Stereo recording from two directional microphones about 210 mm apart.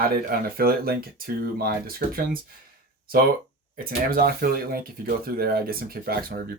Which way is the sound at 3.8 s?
45° right (ahead or behind).